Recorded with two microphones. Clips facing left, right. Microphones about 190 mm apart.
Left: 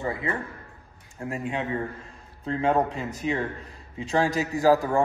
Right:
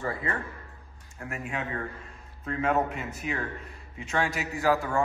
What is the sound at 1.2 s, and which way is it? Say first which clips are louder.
A man's voice: left 5 dB; 25° left (ahead or behind).